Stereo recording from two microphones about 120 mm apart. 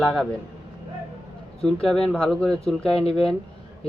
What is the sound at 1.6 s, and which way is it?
Speech, 5° left (ahead or behind).